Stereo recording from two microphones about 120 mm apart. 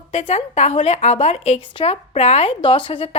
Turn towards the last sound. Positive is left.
turn(degrees=50)  # may be behind; listen again after turning